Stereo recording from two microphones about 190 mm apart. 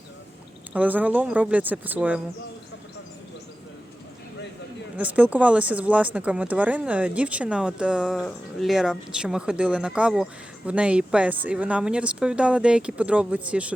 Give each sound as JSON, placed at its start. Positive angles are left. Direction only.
{"t": 0.7, "sound": "speech", "side_deg": -10}
{"t": 4.9, "sound": "a woman's voice", "side_deg": -10}